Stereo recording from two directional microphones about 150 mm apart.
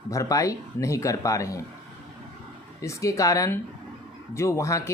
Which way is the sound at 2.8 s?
20° left (ahead or behind).